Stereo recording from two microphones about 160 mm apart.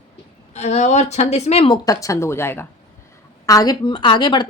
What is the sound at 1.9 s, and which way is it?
A woman's voice, 20° left (ahead or behind).